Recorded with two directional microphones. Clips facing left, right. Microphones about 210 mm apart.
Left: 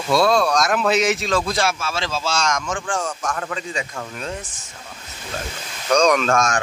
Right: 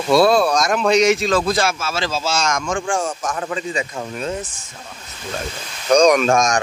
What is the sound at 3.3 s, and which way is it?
Speech, 15° right (ahead or behind).